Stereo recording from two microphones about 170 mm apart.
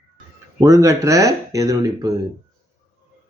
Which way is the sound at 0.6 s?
20° right (ahead or behind).